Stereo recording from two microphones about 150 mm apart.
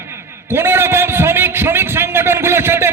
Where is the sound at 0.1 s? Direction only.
15° right (ahead or behind).